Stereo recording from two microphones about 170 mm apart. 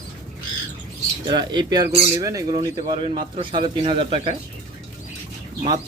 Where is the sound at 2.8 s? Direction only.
30° right (ahead or behind).